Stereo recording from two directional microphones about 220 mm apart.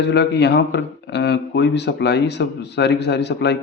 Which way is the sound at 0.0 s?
50° left (ahead or behind).